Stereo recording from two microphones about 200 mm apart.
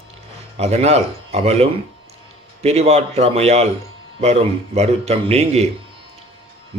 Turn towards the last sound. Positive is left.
turn(degrees=-30)  # may be behind; listen again after turning